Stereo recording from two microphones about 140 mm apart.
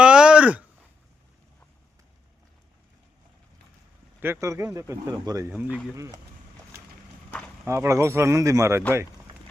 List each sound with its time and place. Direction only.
0.0 s a sound: 5° right (ahead or behind)
4.2 s speech: 20° right (ahead or behind)
7.7 s speech: 20° right (ahead or behind)